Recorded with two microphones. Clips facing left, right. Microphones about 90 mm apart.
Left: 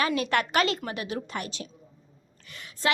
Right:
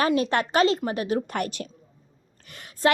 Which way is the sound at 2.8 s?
40° right (ahead or behind).